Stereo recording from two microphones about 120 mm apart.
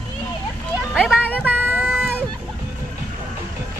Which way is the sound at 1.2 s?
15° left (ahead or behind).